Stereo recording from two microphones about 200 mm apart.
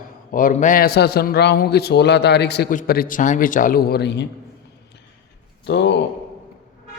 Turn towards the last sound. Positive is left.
turn(degrees=60)  # may be behind; listen again after turning